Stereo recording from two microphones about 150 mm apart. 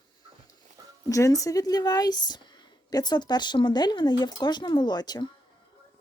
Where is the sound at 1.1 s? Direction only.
20° left (ahead or behind).